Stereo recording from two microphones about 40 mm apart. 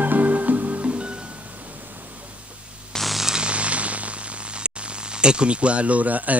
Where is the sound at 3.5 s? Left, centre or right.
Right.